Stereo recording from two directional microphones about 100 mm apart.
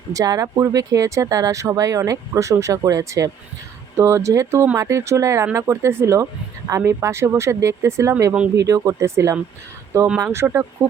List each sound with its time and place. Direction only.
0.1 s speech: 35° right (ahead or behind)